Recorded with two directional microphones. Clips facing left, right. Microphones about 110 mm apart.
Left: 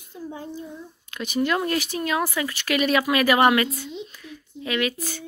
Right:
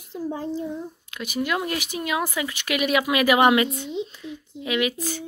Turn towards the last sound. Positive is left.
turn(degrees=-15)  # may be behind; listen again after turning